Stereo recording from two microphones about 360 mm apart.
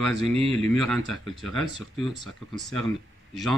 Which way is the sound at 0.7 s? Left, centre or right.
Centre.